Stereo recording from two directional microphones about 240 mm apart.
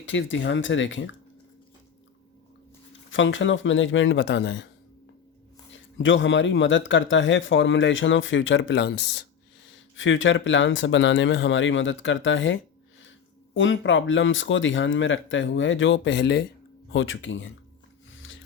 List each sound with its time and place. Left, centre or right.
0.0 s speech: left
3.1 s speech: left
5.7 s speech: left
18.2 s a sound: left